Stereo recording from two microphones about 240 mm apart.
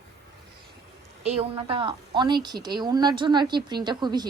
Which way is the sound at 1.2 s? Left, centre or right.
Right.